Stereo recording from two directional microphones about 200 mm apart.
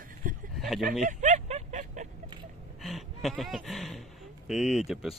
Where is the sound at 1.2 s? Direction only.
35° right (ahead or behind).